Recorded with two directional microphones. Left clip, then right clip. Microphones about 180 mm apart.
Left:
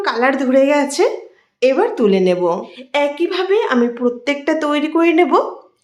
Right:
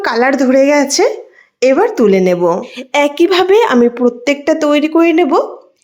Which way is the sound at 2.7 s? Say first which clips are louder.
Right 5 dB; 55° right (ahead or behind).